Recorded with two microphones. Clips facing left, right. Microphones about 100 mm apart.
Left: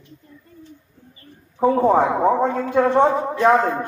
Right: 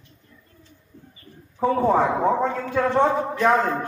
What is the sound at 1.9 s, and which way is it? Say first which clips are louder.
A man's voice: left 1 dB; 15° left (ahead or behind).